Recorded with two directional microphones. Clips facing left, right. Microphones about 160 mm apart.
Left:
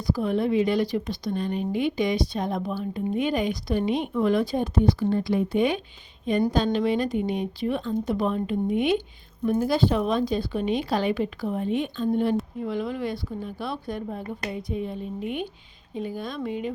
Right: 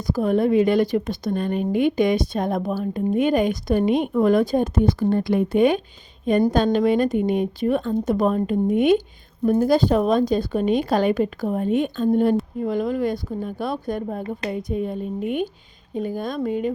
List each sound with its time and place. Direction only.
0.1 s a woman's voice: 45° right (ahead or behind)